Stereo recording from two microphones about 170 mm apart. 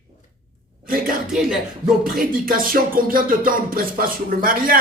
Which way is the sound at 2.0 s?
55° right (ahead or behind).